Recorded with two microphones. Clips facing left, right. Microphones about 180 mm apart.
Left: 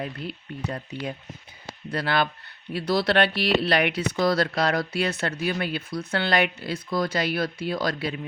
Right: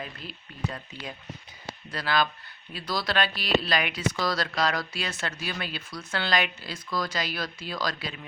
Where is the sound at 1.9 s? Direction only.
60° left (ahead or behind).